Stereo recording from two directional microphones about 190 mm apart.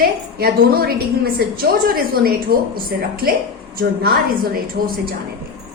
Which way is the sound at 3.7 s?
50° right (ahead or behind).